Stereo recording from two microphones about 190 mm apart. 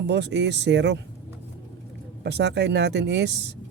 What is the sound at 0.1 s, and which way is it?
Speech, 65° right (ahead or behind).